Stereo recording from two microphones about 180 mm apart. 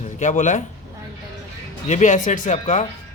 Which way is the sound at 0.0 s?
40° left (ahead or behind).